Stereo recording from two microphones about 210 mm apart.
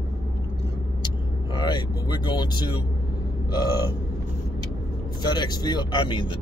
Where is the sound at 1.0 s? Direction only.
20° left (ahead or behind).